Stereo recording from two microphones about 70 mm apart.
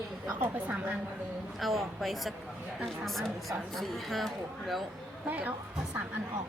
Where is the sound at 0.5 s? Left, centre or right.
Right.